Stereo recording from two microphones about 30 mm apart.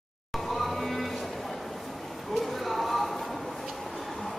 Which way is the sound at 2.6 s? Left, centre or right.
Centre.